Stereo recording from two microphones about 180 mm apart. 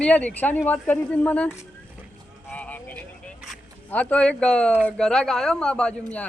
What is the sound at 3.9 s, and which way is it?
A man's voice, 10° left (ahead or behind).